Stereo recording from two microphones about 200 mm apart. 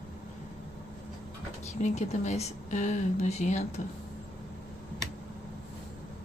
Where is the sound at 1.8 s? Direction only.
35° left (ahead or behind).